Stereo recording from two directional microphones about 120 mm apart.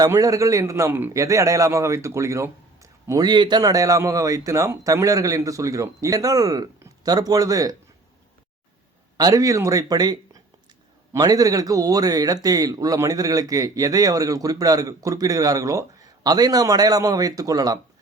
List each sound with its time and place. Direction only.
0.0 s a man's voice: 30° right (ahead or behind)
3.2 s a man's voice: 40° right (ahead or behind)
9.1 s a man's voice: 30° right (ahead or behind)